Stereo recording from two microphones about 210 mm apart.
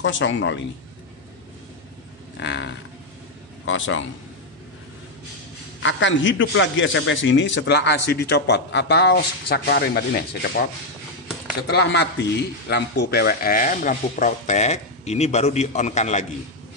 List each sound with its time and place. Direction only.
0.0 s a man's voice: 60° left (ahead or behind)
2.3 s wild animals: 60° left (ahead or behind)
3.6 s a man's voice: 65° left (ahead or behind)
5.8 s a man's voice: 65° left (ahead or behind)
11.6 s a man's voice: 55° left (ahead or behind); by 16.3 s 35° left (ahead or behind)